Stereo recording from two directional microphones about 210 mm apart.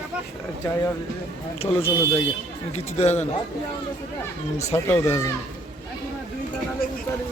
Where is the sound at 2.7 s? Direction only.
30° left (ahead or behind).